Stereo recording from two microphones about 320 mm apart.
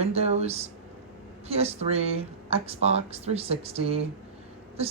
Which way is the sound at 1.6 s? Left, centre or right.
Centre.